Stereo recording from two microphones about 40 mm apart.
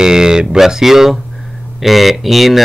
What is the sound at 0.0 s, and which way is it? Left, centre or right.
A man's voice, centre.